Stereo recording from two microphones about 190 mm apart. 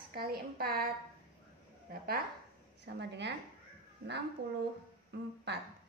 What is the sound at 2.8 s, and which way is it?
Speech, 60° right (ahead or behind).